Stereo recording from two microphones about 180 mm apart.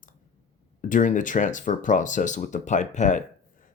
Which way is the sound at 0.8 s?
45° left (ahead or behind).